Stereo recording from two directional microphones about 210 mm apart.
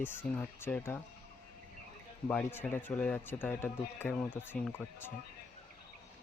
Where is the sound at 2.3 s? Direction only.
5° left (ahead or behind).